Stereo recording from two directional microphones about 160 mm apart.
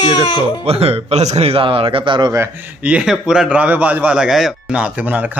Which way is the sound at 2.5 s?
10° right (ahead or behind).